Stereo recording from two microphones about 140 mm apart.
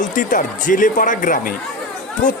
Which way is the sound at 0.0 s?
70° left (ahead or behind).